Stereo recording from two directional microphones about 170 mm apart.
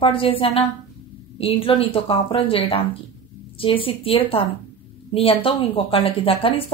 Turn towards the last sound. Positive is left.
turn(degrees=35)  # may be behind; listen again after turning